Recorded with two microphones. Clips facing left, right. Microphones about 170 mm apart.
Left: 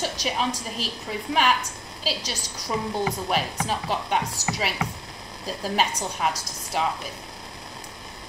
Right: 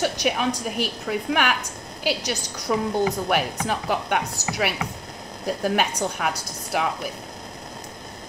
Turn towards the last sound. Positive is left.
turn(degrees=-65)  # may be behind; listen again after turning